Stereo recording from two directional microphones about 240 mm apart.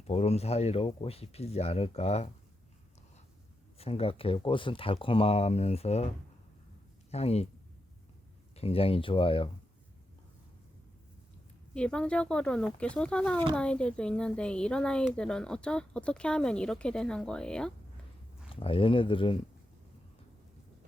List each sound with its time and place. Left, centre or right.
0.1 s speech: left
3.8 s speech: left
7.1 s speech: left
8.5 s speech: left
11.7 s speech: centre
18.4 s speech: left